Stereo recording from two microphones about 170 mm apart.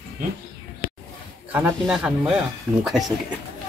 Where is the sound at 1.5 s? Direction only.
10° right (ahead or behind).